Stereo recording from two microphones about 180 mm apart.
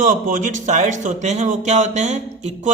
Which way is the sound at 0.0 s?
45° right (ahead or behind).